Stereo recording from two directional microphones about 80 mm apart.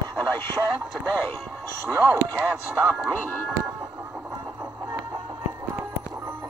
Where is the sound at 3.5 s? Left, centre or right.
Right.